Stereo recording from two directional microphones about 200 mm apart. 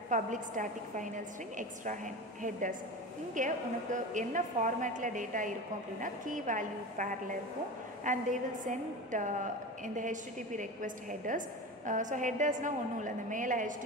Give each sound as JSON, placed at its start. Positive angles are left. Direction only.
{"t": 0.1, "sound": "a woman's voice", "side_deg": -40}